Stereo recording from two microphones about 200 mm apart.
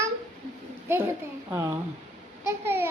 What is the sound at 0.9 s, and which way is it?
Speech, 15° right (ahead or behind).